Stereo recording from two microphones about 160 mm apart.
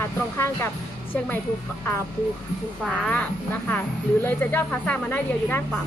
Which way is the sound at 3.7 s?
10° left (ahead or behind).